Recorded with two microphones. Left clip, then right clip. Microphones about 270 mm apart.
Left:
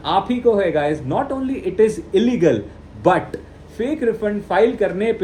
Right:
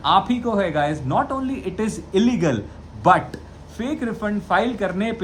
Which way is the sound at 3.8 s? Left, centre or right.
Centre.